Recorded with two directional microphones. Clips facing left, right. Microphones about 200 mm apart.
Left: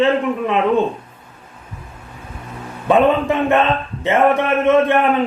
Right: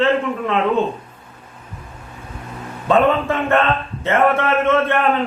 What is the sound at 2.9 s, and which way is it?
A man's voice, 15° left (ahead or behind).